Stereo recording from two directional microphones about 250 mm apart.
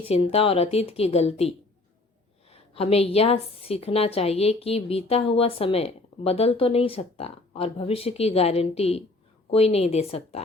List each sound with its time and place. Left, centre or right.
0.1 s a woman's voice: left